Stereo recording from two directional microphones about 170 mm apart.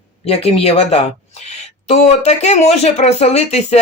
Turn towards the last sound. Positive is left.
turn(degrees=40)  # may be behind; listen again after turning